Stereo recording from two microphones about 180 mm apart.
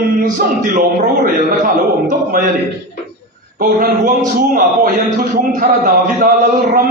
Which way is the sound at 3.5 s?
50° right (ahead or behind).